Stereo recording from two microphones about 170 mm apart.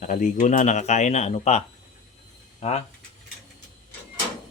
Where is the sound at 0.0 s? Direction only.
45° left (ahead or behind).